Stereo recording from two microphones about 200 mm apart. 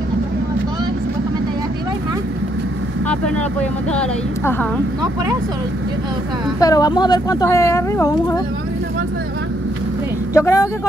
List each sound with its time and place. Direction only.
6.6 s speech: 20° left (ahead or behind)
10.3 s speech: 15° left (ahead or behind)